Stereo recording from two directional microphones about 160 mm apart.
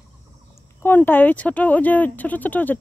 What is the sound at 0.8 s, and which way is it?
Speech, 15° left (ahead or behind).